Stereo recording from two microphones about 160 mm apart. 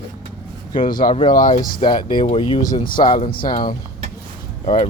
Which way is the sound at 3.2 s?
65° left (ahead or behind).